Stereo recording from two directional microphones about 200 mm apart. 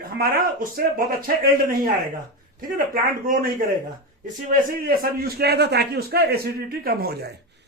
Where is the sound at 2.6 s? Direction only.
45° right (ahead or behind).